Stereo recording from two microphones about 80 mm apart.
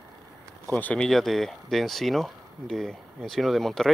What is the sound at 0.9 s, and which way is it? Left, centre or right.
Speech, centre.